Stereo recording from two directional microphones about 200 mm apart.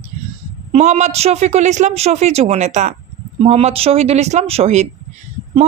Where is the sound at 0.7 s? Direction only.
35° right (ahead or behind).